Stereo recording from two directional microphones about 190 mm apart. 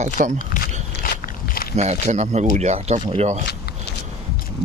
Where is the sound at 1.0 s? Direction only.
50° left (ahead or behind).